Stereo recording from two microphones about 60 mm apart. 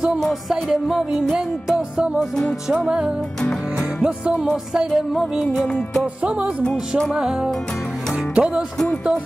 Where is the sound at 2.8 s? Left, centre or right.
Centre.